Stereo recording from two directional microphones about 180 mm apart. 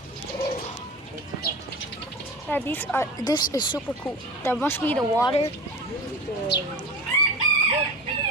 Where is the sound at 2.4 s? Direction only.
10° left (ahead or behind).